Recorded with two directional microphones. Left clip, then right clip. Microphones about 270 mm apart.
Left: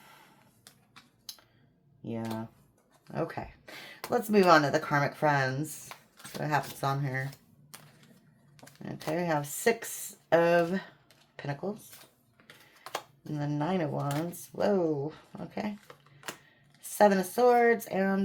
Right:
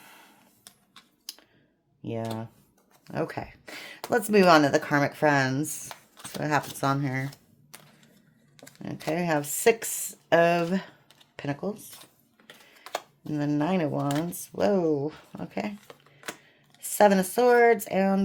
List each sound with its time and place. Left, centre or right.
2.0 s speech: right
3.1 s a sound: right
4.1 s speech: right
8.5 s typing: centre
8.8 s speech: right
12.5 s typing: centre
13.3 s speech: right
16.8 s speech: right